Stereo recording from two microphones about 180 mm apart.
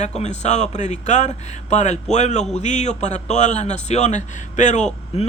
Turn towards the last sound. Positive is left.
turn(degrees=35)  # may be behind; listen again after turning